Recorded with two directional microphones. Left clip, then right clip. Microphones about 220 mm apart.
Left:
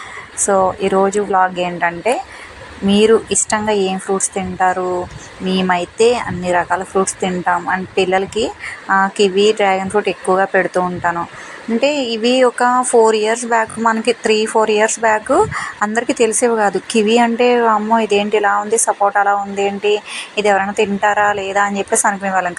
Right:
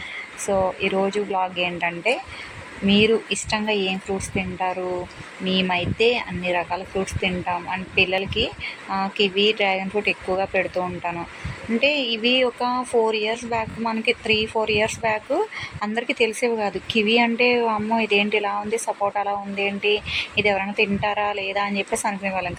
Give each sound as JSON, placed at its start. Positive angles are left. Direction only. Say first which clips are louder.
{"t": 0.4, "sound": "speech", "louder": "left 8 dB", "side_deg": 20}